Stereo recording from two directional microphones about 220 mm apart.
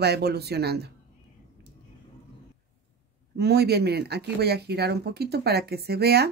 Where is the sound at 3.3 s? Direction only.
45° right (ahead or behind).